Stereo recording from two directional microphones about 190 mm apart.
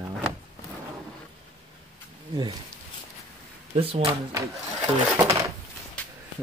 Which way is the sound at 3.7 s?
30° right (ahead or behind).